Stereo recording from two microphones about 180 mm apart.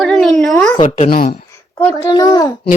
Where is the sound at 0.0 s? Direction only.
Centre (ahead or behind).